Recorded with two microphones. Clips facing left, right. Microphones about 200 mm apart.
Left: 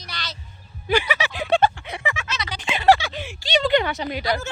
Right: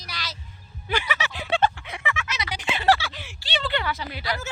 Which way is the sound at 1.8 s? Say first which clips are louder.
Left 3 dB; 35° left (ahead or behind).